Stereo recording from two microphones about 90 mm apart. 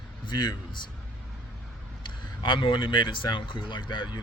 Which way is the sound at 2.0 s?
65° left (ahead or behind).